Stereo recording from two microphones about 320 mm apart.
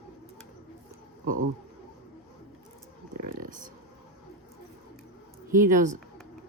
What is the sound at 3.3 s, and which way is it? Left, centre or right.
Speech, right.